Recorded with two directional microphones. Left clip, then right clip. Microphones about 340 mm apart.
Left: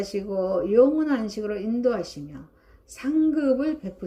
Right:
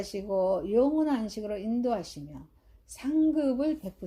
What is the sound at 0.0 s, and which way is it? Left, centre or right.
Speech, right.